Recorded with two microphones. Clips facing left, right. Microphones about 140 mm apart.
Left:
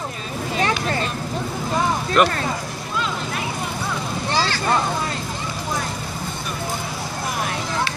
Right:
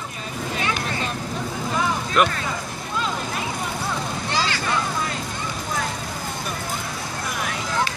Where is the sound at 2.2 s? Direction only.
Centre (ahead or behind).